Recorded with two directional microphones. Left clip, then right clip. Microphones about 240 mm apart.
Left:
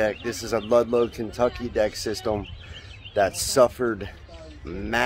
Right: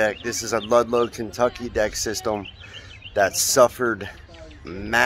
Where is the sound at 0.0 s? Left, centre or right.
Centre.